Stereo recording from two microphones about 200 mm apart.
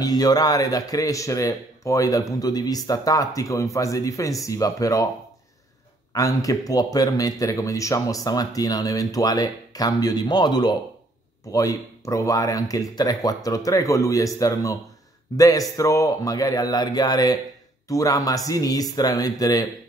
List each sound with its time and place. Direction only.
0.0 s speech: 20° left (ahead or behind)
6.1 s speech: 15° left (ahead or behind)